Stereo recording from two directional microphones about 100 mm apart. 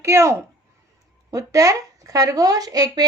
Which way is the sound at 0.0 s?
25° right (ahead or behind).